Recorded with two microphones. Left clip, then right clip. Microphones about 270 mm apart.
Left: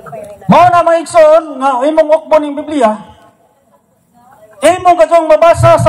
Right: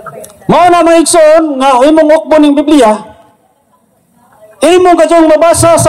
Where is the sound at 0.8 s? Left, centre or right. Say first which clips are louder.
Right 2 dB; right.